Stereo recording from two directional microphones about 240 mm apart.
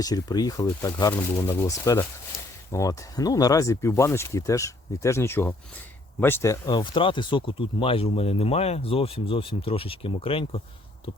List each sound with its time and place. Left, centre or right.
0.0 s speech: centre